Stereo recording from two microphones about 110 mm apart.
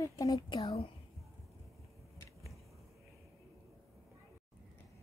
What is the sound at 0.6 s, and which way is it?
Speech, 65° left (ahead or behind).